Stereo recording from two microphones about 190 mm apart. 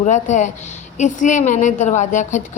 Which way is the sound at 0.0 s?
40° left (ahead or behind).